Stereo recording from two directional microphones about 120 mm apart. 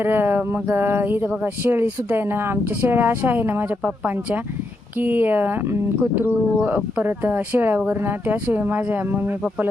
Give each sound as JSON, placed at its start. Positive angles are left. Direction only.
{"t": 0.0, "sound": "speech", "side_deg": -20}